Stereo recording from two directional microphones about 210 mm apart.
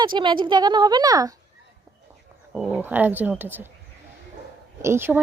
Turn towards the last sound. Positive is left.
turn(degrees=-10)  # may be behind; listen again after turning